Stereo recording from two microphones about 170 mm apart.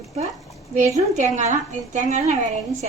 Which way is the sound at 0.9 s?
45° right (ahead or behind).